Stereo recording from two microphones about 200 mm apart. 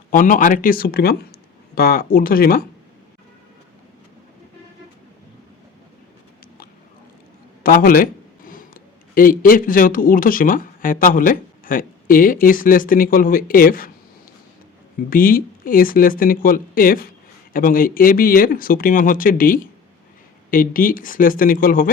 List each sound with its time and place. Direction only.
0.1 s speech: 40° left (ahead or behind)
7.6 s speech: 45° left (ahead or behind)
15.1 s speech: 45° left (ahead or behind)